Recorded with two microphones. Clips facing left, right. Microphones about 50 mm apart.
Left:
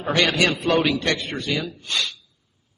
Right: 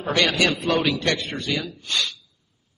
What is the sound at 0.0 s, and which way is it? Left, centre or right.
A man's voice, centre.